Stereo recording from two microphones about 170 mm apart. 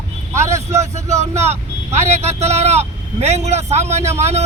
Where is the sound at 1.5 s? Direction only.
40° right (ahead or behind).